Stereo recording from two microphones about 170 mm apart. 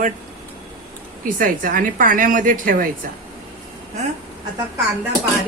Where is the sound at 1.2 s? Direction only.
55° right (ahead or behind).